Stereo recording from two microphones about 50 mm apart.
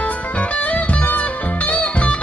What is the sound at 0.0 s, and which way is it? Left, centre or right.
Music, left.